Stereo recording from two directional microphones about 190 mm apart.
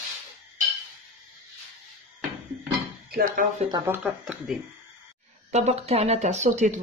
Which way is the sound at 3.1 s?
50° right (ahead or behind).